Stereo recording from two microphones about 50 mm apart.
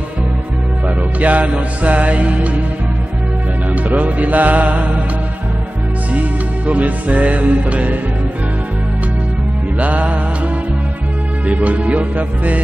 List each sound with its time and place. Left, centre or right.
0.8 s music: right
3.7 s music: right
6.1 s music: right
9.8 s music: right
11.4 s music: right